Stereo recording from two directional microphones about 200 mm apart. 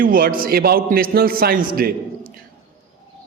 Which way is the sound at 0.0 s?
45° right (ahead or behind).